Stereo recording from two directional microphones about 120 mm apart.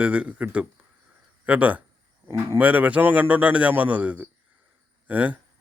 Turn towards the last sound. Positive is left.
turn(degrees=-10)  # may be behind; listen again after turning